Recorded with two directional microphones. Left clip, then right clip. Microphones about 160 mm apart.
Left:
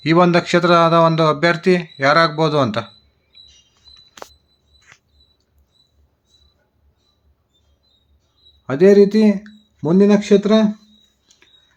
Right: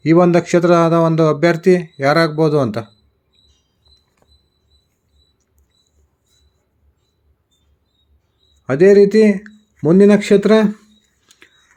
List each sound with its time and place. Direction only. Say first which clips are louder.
0.0 s a man's voice: right 2 dB; 15° right (ahead or behind)
8.6 s a man's voice: right 2 dB; 15° right (ahead or behind); by 10.8 s 30° right (ahead or behind)
11.3 s a sound: right 7 dB; 25° right (ahead or behind)